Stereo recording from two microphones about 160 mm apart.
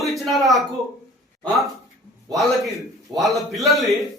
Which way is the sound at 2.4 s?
Centre (ahead or behind).